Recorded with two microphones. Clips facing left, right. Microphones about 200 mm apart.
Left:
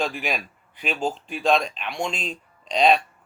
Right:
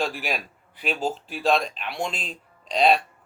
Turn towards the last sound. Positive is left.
turn(degrees=0)  # may be behind; listen again after turning